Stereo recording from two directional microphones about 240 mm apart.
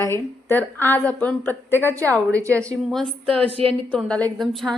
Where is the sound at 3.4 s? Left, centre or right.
Right.